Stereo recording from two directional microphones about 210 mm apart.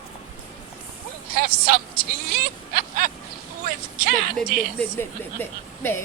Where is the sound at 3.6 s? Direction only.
40° right (ahead or behind).